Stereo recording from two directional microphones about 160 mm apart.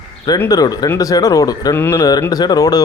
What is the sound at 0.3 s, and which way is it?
A man's voice, 25° left (ahead or behind).